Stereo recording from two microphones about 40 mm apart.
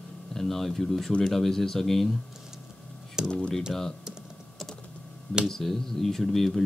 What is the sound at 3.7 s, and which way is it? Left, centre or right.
Speech, centre.